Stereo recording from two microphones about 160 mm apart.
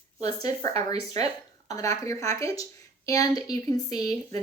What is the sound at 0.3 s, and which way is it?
Speech, 20° left (ahead or behind).